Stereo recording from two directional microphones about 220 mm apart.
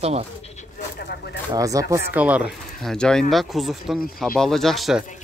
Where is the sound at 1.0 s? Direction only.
45° left (ahead or behind).